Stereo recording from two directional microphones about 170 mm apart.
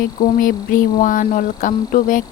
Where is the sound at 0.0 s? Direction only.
55° left (ahead or behind).